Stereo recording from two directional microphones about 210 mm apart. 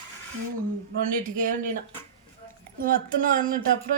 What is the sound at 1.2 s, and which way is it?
Speech, 40° right (ahead or behind).